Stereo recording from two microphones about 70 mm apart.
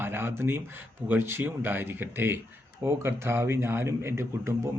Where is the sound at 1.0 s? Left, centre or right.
Right.